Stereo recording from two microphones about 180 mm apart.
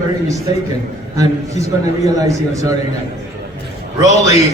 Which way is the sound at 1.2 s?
20° right (ahead or behind).